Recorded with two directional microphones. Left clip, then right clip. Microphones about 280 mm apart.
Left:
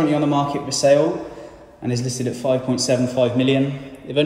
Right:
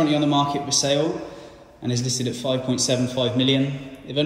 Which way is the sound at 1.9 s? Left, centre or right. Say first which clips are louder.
Left 1 dB; left.